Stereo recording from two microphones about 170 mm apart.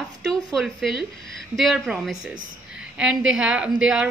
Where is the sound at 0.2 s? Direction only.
Centre (ahead or behind).